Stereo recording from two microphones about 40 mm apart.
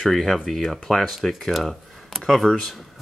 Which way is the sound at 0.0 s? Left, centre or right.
Centre.